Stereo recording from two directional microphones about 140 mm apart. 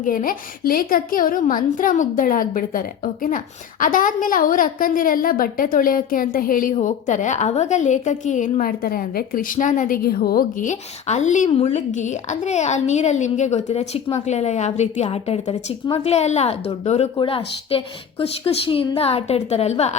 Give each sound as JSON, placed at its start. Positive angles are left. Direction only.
{"t": 0.0, "sound": "a woman's voice", "side_deg": 75}
{"t": 17.2, "sound": "a woman's voice", "side_deg": 40}